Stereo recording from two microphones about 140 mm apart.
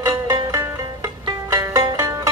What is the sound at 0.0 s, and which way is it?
Music, 30° right (ahead or behind).